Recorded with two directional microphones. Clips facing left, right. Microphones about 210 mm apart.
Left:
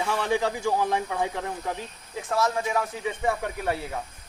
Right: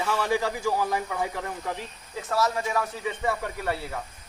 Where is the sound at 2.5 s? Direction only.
20° left (ahead or behind).